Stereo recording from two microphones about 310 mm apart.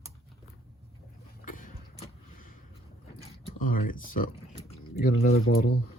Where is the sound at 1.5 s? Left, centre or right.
Left.